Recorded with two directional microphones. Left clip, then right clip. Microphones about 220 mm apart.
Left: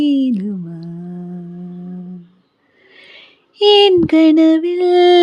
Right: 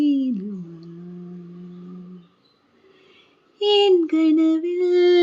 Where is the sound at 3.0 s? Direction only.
45° left (ahead or behind).